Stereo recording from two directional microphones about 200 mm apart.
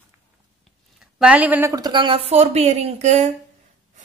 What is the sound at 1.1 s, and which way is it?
A woman's voice, 5° right (ahead or behind).